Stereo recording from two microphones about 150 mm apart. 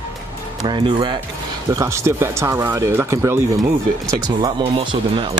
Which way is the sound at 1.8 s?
20° right (ahead or behind).